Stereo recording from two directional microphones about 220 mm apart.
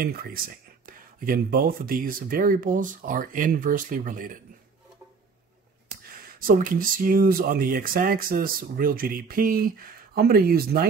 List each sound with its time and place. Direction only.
0.0 s speech: 40° right (ahead or behind)
6.4 s speech: 40° right (ahead or behind)